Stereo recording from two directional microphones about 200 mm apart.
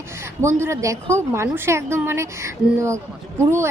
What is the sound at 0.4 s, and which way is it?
Mantra, 15° right (ahead or behind).